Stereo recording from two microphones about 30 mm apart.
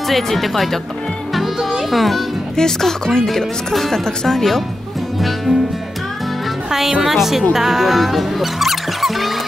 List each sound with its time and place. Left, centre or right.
0.1 s speech: centre
1.3 s music: centre
2.5 s speech: centre
5.5 s speech: right
7.0 s a woman's voice: centre